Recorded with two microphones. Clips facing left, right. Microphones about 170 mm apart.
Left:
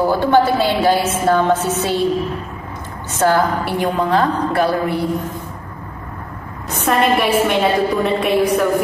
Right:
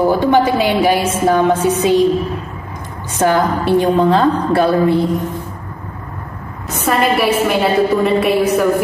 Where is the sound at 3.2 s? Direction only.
20° right (ahead or behind).